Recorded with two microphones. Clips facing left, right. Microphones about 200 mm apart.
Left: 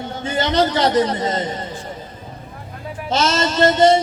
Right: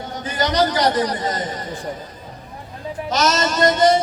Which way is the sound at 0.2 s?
25° left (ahead or behind).